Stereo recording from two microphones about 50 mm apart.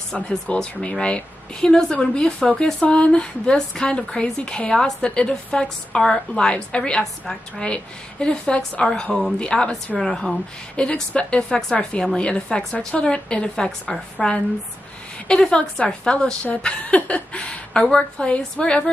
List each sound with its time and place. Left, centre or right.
0.5 s a woman's voice: left
9.9 s speech: centre
10.8 s a woman's voice: left
16.4 s a woman's voice: left